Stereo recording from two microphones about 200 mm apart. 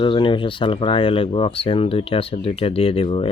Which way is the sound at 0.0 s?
25° left (ahead or behind).